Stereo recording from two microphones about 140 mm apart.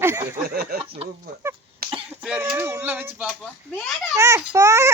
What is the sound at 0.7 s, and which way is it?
Speech, 90° right.